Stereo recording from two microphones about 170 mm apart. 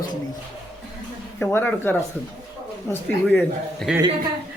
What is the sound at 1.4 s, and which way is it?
A man's voice, 10° left (ahead or behind).